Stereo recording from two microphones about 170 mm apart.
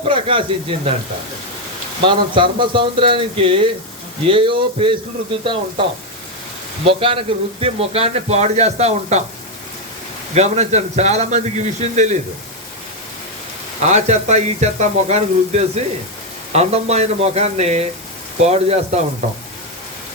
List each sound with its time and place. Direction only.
0.1 s a man's voice: 30° right (ahead or behind)
2.0 s a man's voice: 30° right (ahead or behind)
6.8 s a man's voice: 30° right (ahead or behind)
10.3 s a man's voice: 40° right (ahead or behind)
13.8 s a man's voice: 40° right (ahead or behind)